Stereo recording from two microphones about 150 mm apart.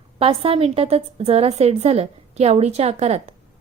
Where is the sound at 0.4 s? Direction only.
40° right (ahead or behind).